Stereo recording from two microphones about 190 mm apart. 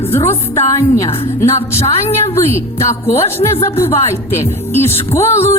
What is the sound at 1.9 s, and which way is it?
Speech, 35° left (ahead or behind).